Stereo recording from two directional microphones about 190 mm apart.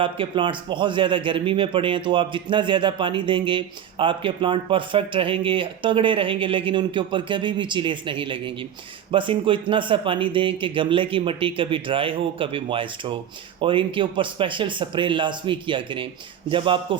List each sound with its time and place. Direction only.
0.0 s speech: 25° right (ahead or behind)